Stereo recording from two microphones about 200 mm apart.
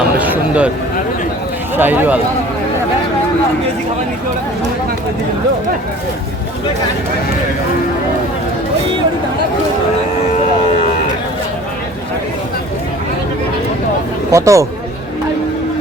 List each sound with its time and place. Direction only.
0.2 s a sound: 5° right (ahead or behind)
1.7 s speech: 10° right (ahead or behind)
14.3 s speech: 15° right (ahead or behind)